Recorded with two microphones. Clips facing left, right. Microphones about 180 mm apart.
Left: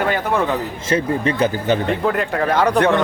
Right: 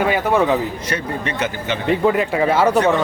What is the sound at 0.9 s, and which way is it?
Speech, 35° left (ahead or behind).